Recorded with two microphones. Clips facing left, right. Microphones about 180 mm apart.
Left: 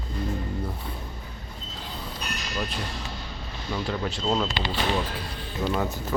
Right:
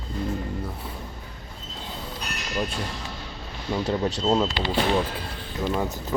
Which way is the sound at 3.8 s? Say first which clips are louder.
Right 4 dB; 25° right (ahead or behind).